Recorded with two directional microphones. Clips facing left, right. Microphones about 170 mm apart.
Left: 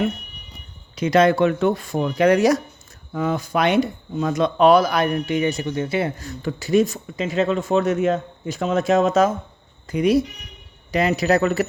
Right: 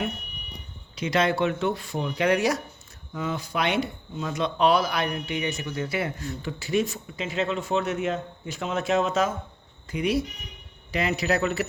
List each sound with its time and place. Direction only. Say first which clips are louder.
0.9 s speech: left 8 dB; 45° left (ahead or behind)
3.1 s speech: left 7 dB; 55° left (ahead or behind); by 6.2 s 30° left (ahead or behind)
6.4 s speech: left 8 dB; 45° left (ahead or behind)